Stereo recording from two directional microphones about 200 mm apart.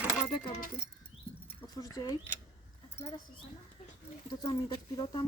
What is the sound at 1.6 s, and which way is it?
Speech, 20° left (ahead or behind).